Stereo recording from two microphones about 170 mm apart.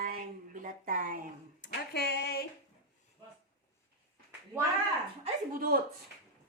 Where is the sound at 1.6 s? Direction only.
75° left (ahead or behind).